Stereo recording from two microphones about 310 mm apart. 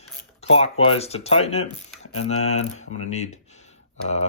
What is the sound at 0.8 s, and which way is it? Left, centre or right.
Speech, centre.